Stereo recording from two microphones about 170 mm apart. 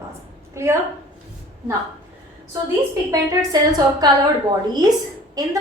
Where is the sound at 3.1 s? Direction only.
20° right (ahead or behind).